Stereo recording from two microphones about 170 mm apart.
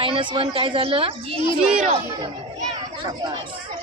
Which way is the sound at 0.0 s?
30° right (ahead or behind).